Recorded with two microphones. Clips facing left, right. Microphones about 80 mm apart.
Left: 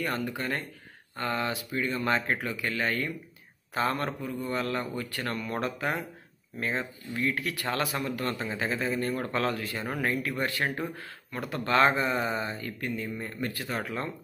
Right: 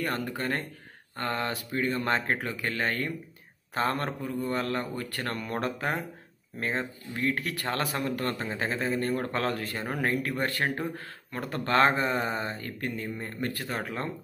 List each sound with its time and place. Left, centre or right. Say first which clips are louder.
0.4 s speech: right 1 dB; right